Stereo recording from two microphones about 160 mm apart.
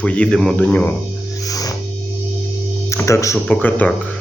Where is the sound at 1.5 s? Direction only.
20° left (ahead or behind).